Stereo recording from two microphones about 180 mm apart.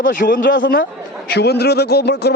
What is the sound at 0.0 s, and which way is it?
Speech, 50° left (ahead or behind).